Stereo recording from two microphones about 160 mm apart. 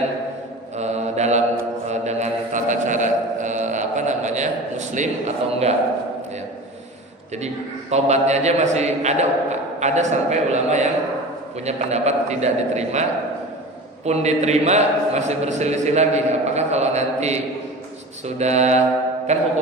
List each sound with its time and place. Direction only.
0.8 s mantra: 45° right (ahead or behind)
1.9 s a sound: 45° right (ahead or behind)
4.9 s a man's voice: 45° right (ahead or behind)
7.4 s a man's voice: 45° right (ahead or behind)
18.3 s a man's voice: 45° right (ahead or behind)